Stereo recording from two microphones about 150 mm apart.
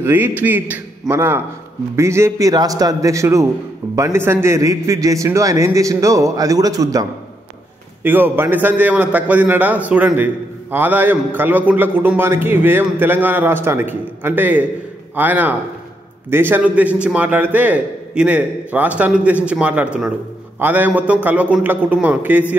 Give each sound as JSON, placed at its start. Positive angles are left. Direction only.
{"t": 0.0, "sound": "a man's voice", "side_deg": -15}